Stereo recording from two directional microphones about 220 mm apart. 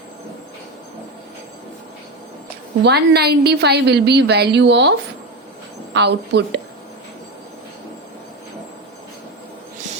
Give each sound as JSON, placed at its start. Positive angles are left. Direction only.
{"t": 2.8, "sound": "a woman's voice", "side_deg": -45}